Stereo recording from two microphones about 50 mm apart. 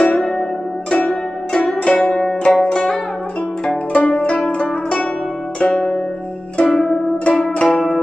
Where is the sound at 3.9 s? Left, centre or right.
Left.